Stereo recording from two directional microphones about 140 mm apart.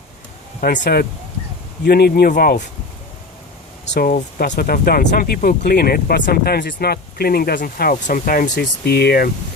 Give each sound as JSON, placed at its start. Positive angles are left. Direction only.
{"t": 0.6, "sound": "speech", "side_deg": 90}
{"t": 4.0, "sound": "speech", "side_deg": 75}